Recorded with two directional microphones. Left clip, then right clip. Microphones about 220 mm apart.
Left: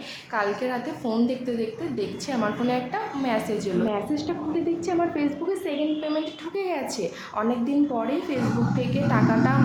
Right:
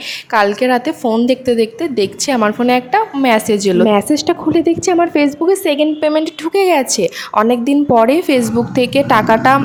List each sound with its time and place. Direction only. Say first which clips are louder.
0.3 s a woman's voice: right 14 dB; 40° right (ahead or behind)